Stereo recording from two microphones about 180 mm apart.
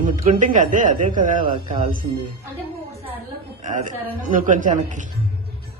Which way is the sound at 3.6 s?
45° right (ahead or behind).